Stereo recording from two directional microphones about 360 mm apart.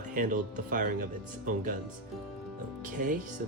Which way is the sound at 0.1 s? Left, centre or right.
Right.